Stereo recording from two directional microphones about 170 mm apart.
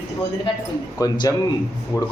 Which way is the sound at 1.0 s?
25° left (ahead or behind).